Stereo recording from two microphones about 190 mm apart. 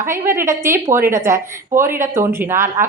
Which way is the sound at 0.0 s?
15° right (ahead or behind).